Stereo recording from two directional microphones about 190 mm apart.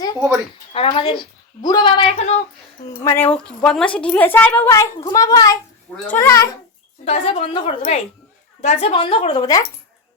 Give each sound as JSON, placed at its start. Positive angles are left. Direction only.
{"t": 0.7, "sound": "speech", "side_deg": 30}
{"t": 2.1, "sound": "a woman's voice", "side_deg": 35}
{"t": 2.9, "sound": "a woman's voice", "side_deg": 15}
{"t": 7.0, "sound": "a woman's voice", "side_deg": 35}